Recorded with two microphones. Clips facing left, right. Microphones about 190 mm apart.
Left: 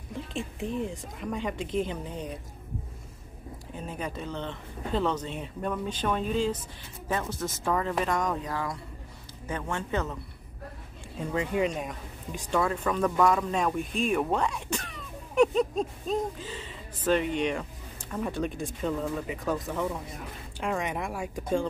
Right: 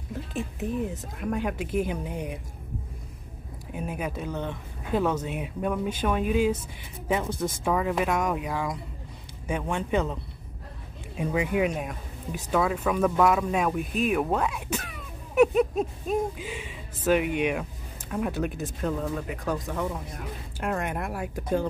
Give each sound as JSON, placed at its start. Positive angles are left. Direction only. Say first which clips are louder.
{"t": 0.1, "sound": "speech", "louder": "right 2 dB", "side_deg": -5}
{"t": 3.7, "sound": "speech", "louder": "right 4 dB", "side_deg": -10}
{"t": 11.1, "sound": "speech", "louder": "right 2 dB", "side_deg": -10}